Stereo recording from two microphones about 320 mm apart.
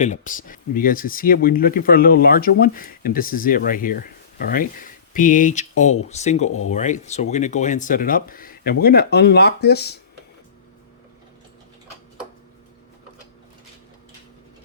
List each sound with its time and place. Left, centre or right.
0.0 s speech: left